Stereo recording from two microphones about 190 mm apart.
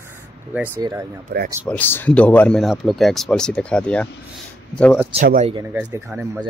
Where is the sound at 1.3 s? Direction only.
55° right (ahead or behind).